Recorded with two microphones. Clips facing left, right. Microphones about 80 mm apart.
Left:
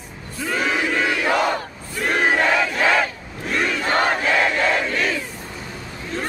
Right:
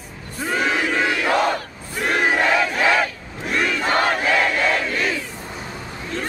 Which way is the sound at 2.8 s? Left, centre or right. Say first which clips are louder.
Even; centre.